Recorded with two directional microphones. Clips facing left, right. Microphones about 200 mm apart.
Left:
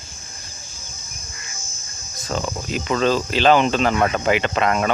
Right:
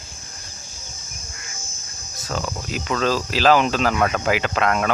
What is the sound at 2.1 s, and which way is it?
Cricket, centre (ahead or behind).